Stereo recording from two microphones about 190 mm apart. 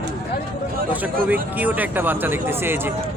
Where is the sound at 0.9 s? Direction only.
10° right (ahead or behind).